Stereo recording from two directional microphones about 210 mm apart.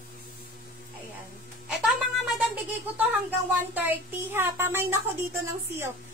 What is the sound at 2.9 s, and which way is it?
A woman's voice, 10° right (ahead or behind).